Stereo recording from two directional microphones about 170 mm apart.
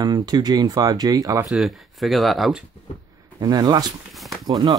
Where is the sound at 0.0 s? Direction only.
25° right (ahead or behind).